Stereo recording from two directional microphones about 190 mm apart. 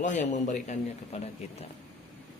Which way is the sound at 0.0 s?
40° left (ahead or behind).